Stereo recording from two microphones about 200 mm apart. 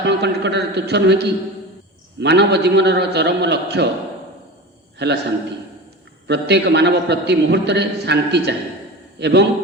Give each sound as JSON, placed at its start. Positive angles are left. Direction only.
{"t": 0.0, "sound": "a man's voice", "side_deg": -60}
{"t": 5.0, "sound": "a man's voice", "side_deg": -55}
{"t": 6.2, "sound": "a man's voice", "side_deg": -55}